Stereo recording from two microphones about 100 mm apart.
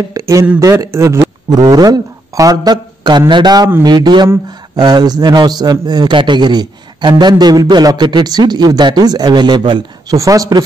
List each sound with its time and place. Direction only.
0.1 s a man's voice: 30° right (ahead or behind)
1.2 s a man's voice: 40° right (ahead or behind)
10.1 s speech: 35° right (ahead or behind)